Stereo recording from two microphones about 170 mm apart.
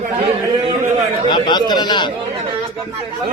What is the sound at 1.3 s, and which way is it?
Speech, 25° left (ahead or behind).